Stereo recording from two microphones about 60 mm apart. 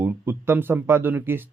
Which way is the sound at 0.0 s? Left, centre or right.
Right.